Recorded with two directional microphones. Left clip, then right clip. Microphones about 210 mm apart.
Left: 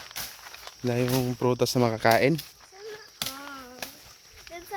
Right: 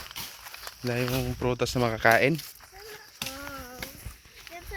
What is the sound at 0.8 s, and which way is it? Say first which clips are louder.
Speech: left 3 dB; 25° left (ahead or behind).